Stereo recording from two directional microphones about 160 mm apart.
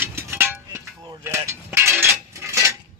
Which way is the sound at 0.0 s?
15° right (ahead or behind).